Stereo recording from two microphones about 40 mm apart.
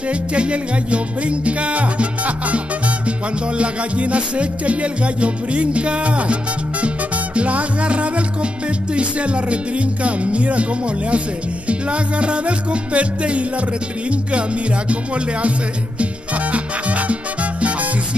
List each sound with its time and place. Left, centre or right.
0.1 s music: right
7.3 s music: right
16.0 s salsa music: right